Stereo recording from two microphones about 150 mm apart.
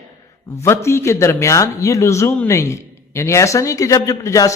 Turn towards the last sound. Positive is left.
turn(degrees=20)  # may be behind; listen again after turning